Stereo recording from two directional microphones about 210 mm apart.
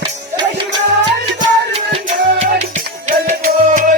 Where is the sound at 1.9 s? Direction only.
30° right (ahead or behind).